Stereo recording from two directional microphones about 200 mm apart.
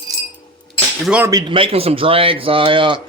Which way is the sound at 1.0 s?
5° right (ahead or behind).